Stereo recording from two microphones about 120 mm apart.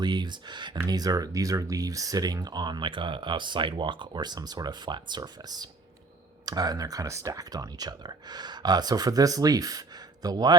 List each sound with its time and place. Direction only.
0.0 s speech: 35° right (ahead or behind)